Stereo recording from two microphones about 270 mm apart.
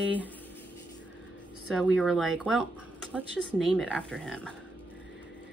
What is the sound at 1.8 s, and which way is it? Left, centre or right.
Speech, centre.